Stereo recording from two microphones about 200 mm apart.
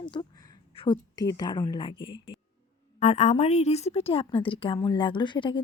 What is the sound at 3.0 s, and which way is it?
Speech, 35° left (ahead or behind).